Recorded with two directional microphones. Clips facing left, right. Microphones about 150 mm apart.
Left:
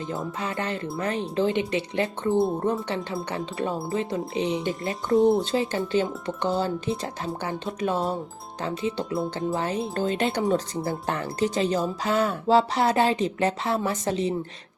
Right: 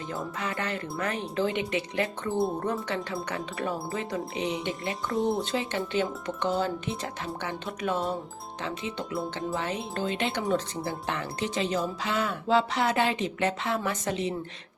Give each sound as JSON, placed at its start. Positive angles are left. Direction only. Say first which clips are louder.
{"t": 0.3, "sound": "speech", "louder": "left 3 dB", "side_deg": 30}
{"t": 5.1, "sound": "speech", "louder": "left 9 dB", "side_deg": 0}
{"t": 5.5, "sound": "speech", "louder": "left 5 dB", "side_deg": 35}